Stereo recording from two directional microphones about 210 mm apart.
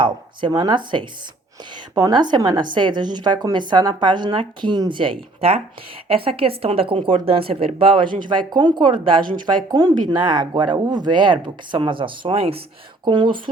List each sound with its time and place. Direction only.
0.0 s a woman's voice: 20° right (ahead or behind)